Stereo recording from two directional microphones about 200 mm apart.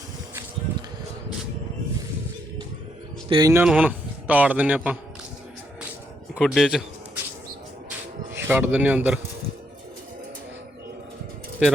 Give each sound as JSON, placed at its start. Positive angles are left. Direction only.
{"t": 3.2, "sound": "speech", "side_deg": -25}
{"t": 3.5, "sound": "a man's voice", "side_deg": -10}
{"t": 6.3, "sound": "a man's voice", "side_deg": 0}
{"t": 8.3, "sound": "speech", "side_deg": -10}